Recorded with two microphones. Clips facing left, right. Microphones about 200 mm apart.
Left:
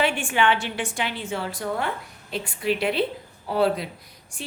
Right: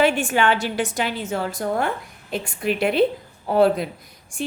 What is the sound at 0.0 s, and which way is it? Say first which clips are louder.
A woman's voice: right 4 dB; 40° right (ahead or behind).